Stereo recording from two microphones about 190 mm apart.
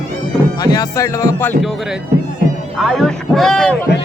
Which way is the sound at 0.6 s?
20° left (ahead or behind).